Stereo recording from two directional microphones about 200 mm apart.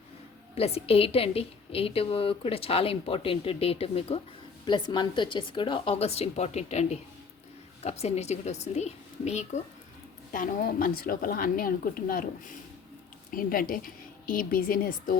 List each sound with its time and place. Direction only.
0.5 s a woman's voice: 30° left (ahead or behind)
10.3 s speech: 45° left (ahead or behind)